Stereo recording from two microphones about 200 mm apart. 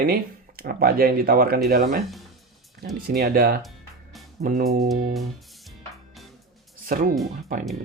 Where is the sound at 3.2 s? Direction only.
50° right (ahead or behind).